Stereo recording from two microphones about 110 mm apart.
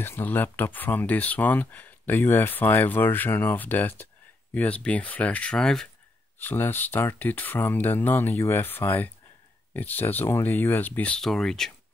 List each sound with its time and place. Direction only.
0.0 s speech: 20° left (ahead or behind)
6.4 s speech: 20° left (ahead or behind)